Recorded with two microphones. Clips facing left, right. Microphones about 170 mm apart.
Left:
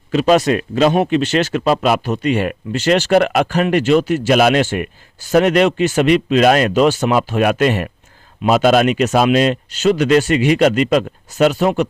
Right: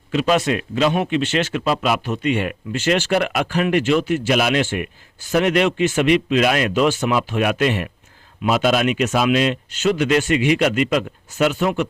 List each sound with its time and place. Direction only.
0.1 s speech: 40° left (ahead or behind)